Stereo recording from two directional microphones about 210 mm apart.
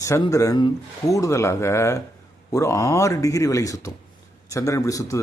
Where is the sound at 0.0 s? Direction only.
15° left (ahead or behind).